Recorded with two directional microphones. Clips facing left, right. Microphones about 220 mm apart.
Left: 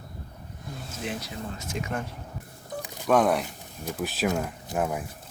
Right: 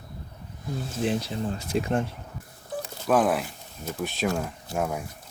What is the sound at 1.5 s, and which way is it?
Speech, 35° right (ahead or behind).